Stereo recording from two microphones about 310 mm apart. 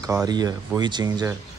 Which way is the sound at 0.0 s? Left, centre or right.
Centre.